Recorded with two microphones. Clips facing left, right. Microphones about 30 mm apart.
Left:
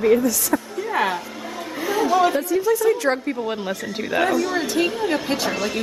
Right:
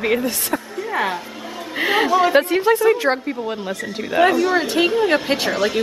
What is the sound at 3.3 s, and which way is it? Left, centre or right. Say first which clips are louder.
Speech: even; centre.